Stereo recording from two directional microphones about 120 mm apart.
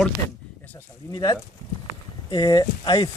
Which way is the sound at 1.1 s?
35° left (ahead or behind).